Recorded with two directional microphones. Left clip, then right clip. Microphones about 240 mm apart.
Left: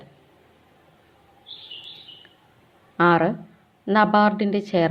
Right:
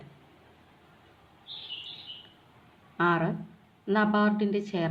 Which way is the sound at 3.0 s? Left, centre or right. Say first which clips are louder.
Left 8 dB; left.